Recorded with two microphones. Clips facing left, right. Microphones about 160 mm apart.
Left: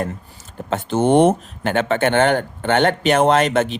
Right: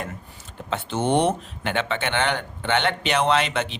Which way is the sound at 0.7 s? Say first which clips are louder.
Left 6 dB; 50° left (ahead or behind).